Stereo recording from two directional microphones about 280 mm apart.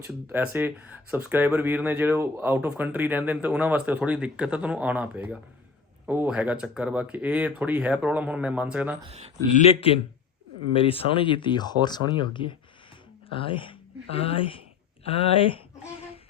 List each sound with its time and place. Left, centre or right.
0.3 s speech: centre
9.0 s speech: right
9.6 s a man's voice: left